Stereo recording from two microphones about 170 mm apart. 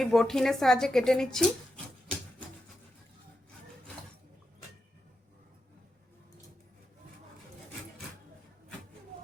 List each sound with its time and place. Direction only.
0.0 s a woman's voice: centre (ahead or behind)